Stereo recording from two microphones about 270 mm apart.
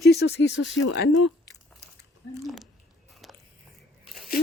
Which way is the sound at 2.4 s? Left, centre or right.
Centre.